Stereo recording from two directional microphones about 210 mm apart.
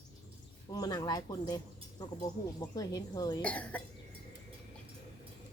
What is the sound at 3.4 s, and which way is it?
Speech, 5° left (ahead or behind).